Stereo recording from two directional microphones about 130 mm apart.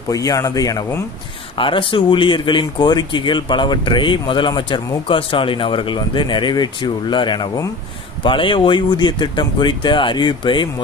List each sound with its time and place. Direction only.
0.1 s speech: 25° left (ahead or behind)
1.6 s speech: 40° left (ahead or behind)